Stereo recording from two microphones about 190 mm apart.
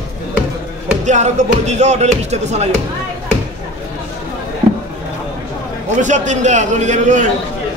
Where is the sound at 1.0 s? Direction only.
40° right (ahead or behind).